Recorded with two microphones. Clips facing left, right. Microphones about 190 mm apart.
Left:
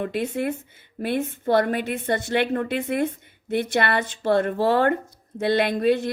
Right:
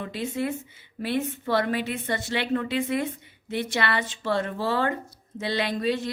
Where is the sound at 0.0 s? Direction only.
55° left (ahead or behind).